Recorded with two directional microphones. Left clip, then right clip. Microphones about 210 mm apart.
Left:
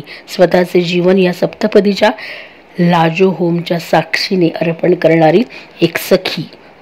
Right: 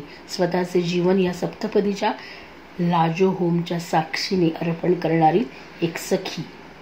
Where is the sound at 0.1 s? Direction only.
45° left (ahead or behind).